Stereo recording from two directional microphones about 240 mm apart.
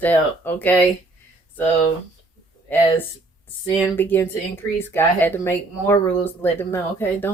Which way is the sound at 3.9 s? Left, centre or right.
Centre.